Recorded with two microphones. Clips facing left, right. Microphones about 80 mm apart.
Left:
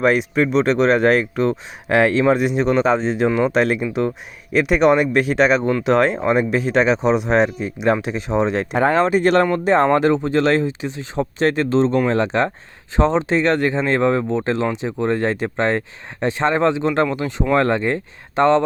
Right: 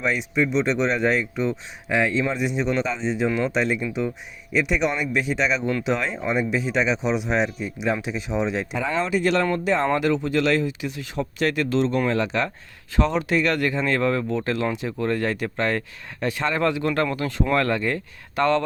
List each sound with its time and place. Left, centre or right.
0.0 s speech: left